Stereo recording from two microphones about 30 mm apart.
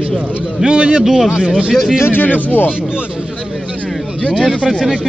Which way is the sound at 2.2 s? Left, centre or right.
Left.